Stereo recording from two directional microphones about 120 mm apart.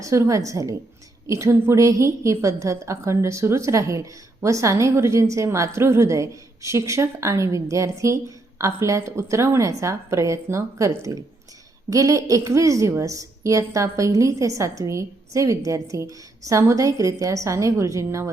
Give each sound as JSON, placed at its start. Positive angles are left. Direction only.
{"t": 0.0, "sound": "a woman's voice", "side_deg": -25}